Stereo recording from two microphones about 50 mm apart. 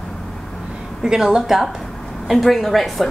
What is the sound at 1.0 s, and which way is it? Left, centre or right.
A woman's voice, centre.